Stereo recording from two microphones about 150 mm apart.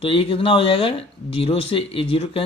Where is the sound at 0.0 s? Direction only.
40° left (ahead or behind).